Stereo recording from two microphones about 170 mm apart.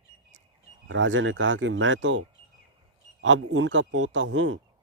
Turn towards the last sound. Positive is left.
turn(degrees=-90)